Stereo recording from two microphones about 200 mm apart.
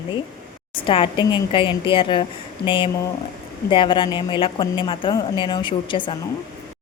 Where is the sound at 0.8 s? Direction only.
25° left (ahead or behind).